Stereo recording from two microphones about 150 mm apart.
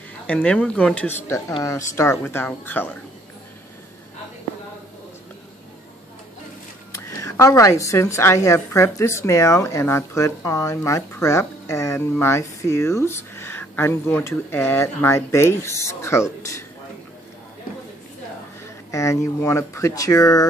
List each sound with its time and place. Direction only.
0.3 s speech: 5° left (ahead or behind)
6.9 s a woman's voice: 20° left (ahead or behind)
18.9 s a woman's voice: 20° left (ahead or behind)